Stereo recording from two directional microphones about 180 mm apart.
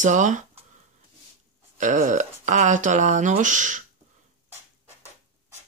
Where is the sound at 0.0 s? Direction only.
45° right (ahead or behind).